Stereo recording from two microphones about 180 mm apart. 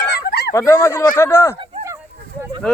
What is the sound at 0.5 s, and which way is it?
Speech, 15° left (ahead or behind).